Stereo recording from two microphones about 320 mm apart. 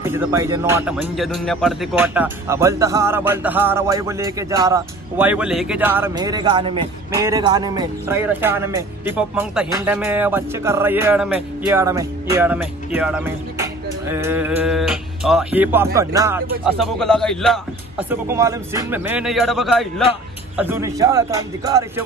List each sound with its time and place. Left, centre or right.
0.0 s speech: centre